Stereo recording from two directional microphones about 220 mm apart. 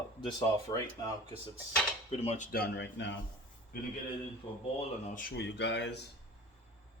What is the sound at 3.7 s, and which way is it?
Speech, 40° left (ahead or behind).